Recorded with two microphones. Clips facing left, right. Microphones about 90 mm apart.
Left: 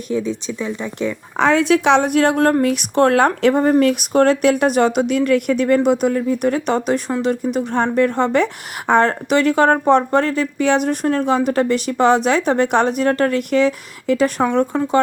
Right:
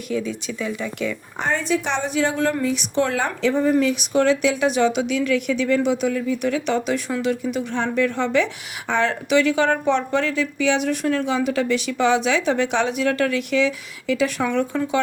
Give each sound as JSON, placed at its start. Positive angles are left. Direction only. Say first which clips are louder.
{"t": 0.1, "sound": "speech", "louder": "left 4 dB", "side_deg": 25}
{"t": 1.4, "sound": "a woman's voice", "louder": "left 8 dB", "side_deg": 85}